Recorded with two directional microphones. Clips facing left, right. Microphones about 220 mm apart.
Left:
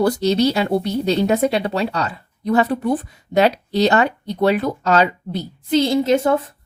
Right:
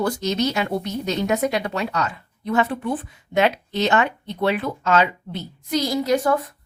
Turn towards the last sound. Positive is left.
turn(degrees=25)  # may be behind; listen again after turning